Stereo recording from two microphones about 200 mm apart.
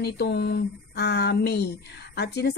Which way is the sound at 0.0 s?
55° left (ahead or behind).